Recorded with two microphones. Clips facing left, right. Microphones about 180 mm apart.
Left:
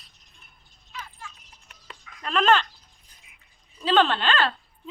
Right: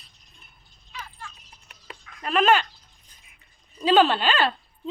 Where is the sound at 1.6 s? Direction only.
10° right (ahead or behind).